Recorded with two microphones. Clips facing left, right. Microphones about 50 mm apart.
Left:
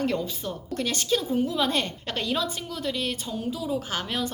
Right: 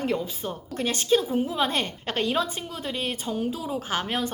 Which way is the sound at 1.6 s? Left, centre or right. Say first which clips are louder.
Even; right.